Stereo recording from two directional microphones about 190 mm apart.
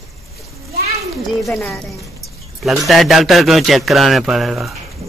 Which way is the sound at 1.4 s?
5° left (ahead or behind).